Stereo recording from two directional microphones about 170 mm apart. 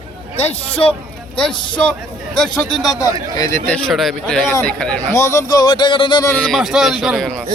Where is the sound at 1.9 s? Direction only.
5° left (ahead or behind).